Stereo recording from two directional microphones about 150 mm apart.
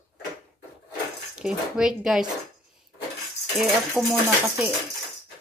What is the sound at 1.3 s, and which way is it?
Speech, 5° right (ahead or behind).